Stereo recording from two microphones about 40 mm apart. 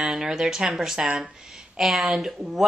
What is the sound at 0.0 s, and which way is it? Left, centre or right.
Speech, centre.